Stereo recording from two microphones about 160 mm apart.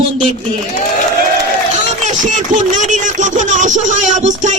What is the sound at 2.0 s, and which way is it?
Speech, 50° right (ahead or behind).